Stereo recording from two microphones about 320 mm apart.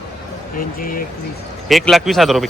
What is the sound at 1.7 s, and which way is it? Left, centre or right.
Speech, centre.